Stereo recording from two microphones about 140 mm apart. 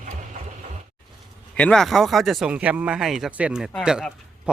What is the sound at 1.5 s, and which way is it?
A man's voice, 5° left (ahead or behind).